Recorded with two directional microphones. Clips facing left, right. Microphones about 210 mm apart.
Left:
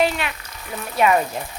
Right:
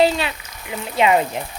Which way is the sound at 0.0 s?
30° right (ahead or behind).